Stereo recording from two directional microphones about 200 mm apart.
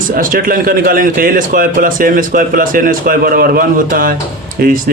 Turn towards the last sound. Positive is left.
turn(degrees=-45)  # may be behind; listen again after turning